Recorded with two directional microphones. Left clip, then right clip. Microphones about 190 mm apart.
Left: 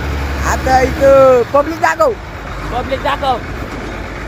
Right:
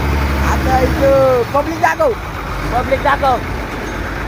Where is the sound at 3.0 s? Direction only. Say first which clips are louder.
Right 1 dB; 20° left (ahead or behind).